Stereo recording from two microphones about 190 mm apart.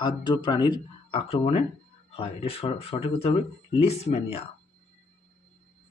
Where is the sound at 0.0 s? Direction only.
25° left (ahead or behind).